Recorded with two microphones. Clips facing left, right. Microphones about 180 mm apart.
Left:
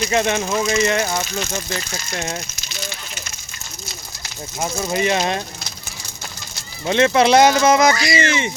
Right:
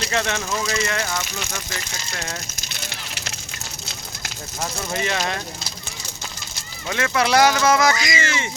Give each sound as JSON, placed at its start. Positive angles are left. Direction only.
{"t": 0.1, "sound": "speech", "side_deg": 20}
{"t": 4.6, "sound": "speech", "side_deg": 20}
{"t": 6.8, "sound": "speech", "side_deg": 25}
{"t": 7.9, "sound": "speech", "side_deg": -20}
{"t": 8.2, "sound": "speech", "side_deg": 20}